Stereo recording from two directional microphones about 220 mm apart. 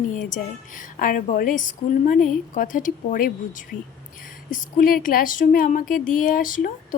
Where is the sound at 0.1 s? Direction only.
35° left (ahead or behind).